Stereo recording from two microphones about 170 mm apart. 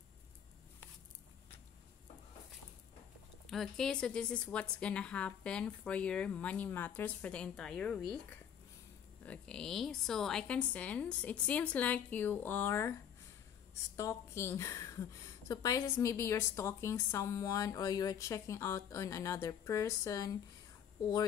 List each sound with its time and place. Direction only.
3.4 s a woman's voice: centre (ahead or behind)
9.2 s a woman's voice: 5° left (ahead or behind)
13.9 s a woman's voice: 15° left (ahead or behind)